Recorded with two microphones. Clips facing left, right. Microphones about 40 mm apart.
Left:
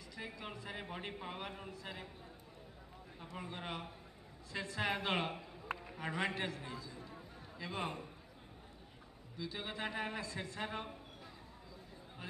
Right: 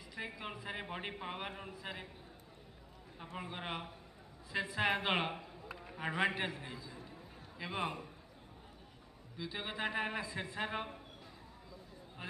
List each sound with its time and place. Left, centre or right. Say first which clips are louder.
0.1 s a man's voice: right 3 dB; centre
3.3 s a man's voice: right 2 dB; centre
9.4 s a man's voice: right 3 dB; centre